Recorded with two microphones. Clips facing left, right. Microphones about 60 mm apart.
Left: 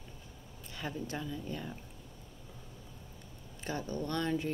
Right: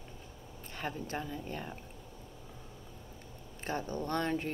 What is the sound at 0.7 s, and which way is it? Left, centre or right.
A woman's voice, right.